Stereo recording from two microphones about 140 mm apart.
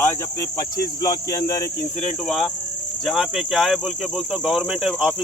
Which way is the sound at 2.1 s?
5° left (ahead or behind).